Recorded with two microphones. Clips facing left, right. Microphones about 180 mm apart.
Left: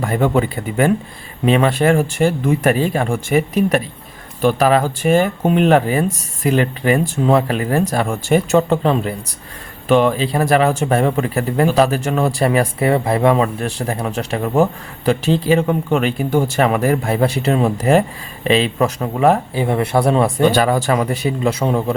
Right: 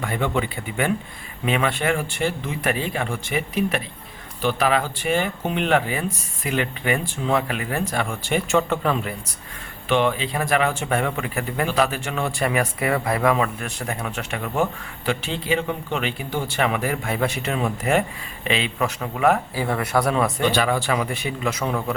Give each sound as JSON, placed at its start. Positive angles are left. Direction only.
{"t": 0.0, "sound": "speech", "side_deg": 40}
{"t": 20.4, "sound": "speech", "side_deg": 40}